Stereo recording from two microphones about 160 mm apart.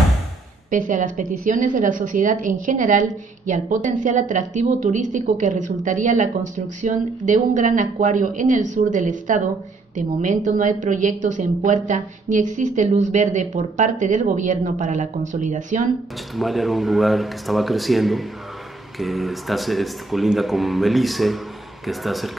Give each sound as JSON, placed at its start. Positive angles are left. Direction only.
{"t": 0.7, "sound": "a woman's voice", "side_deg": -55}
{"t": 16.3, "sound": "speech", "side_deg": 0}